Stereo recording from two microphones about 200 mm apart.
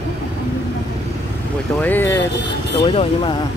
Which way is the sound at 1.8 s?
10° left (ahead or behind).